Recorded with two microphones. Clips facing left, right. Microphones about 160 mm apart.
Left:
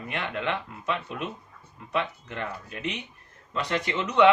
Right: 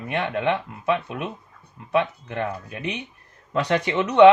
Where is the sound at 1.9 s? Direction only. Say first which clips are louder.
Right 7 dB; 60° right (ahead or behind).